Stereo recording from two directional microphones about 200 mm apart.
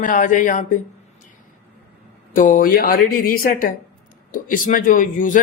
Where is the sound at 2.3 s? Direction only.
40° left (ahead or behind).